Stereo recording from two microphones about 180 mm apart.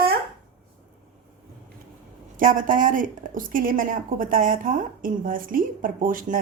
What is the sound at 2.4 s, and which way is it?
A woman's voice, 45° right (ahead or behind).